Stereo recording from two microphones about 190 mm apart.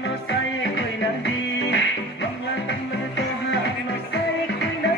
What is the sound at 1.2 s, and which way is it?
Music, 60° left (ahead or behind).